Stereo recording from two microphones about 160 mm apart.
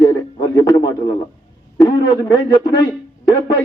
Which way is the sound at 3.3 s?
25° left (ahead or behind).